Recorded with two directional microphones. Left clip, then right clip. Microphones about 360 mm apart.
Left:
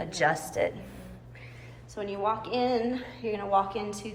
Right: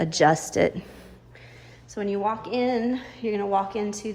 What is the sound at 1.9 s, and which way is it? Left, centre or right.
Speech, right.